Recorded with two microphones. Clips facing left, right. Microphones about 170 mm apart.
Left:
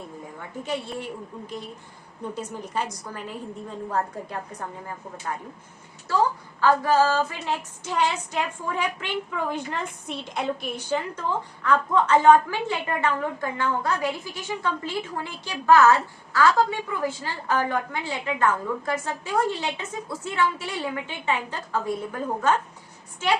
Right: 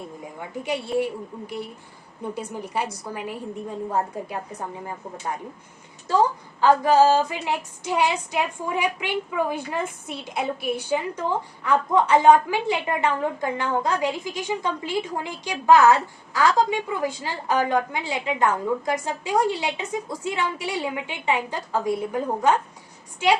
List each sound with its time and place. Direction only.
0.6 s a woman's voice: 15° right (ahead or behind)
6.6 s a woman's voice: 20° right (ahead or behind)